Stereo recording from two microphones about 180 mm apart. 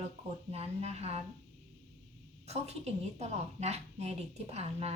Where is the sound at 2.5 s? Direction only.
35° right (ahead or behind).